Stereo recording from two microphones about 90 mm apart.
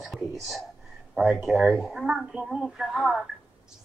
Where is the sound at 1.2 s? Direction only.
10° right (ahead or behind).